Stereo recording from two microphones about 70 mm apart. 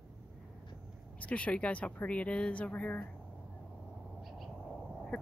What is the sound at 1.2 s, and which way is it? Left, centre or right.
Speech, centre.